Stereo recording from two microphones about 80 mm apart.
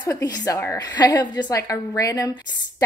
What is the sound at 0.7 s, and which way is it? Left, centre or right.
A woman's voice, left.